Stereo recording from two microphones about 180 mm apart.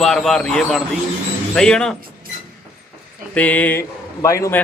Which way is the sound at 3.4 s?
10° left (ahead or behind).